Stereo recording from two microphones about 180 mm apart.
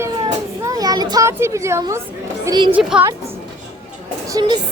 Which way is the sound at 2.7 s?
10° right (ahead or behind).